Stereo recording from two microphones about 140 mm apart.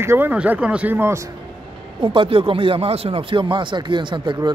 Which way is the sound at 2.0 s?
40° right (ahead or behind).